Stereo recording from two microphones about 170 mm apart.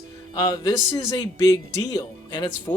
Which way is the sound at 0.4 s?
20° left (ahead or behind).